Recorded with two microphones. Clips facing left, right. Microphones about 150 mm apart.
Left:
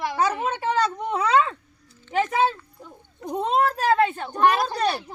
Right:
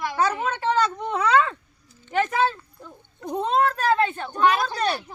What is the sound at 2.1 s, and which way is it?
A child's voice, centre (ahead or behind).